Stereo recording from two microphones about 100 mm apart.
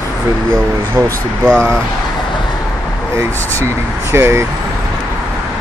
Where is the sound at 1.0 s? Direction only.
30° right (ahead or behind).